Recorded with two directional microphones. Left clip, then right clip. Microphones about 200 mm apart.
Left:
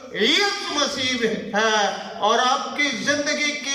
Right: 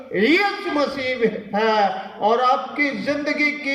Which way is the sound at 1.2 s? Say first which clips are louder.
Right 2 dB; 25° right (ahead or behind).